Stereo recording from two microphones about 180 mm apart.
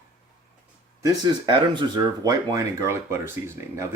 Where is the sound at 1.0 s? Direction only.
25° right (ahead or behind).